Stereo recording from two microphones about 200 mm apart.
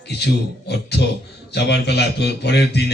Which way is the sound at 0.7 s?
55° left (ahead or behind).